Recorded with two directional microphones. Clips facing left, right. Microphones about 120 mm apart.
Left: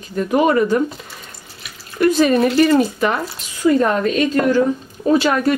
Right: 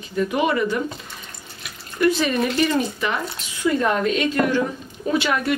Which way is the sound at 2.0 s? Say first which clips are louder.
Left 6 dB; 40° left (ahead or behind).